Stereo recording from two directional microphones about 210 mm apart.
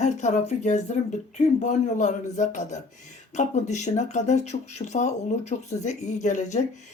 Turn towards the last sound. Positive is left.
turn(degrees=35)  # may be behind; listen again after turning